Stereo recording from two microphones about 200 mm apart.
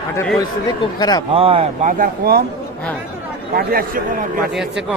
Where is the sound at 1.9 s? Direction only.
45° right (ahead or behind).